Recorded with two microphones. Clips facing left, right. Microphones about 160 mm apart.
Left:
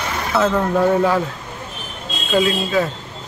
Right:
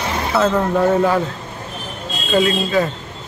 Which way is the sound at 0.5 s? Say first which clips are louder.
Right 1 dB; centre (ahead or behind).